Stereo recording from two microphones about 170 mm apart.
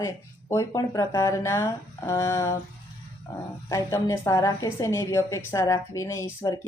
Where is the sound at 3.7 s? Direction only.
20° left (ahead or behind).